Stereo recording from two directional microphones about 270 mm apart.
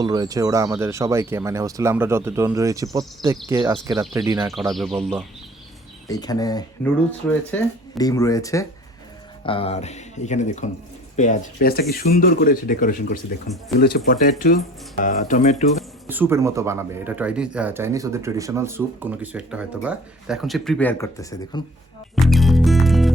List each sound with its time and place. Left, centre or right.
0.0 s speech: centre
4.7 s speech: centre
6.1 s speech: centre
16.0 s speech: centre
22.1 s music: centre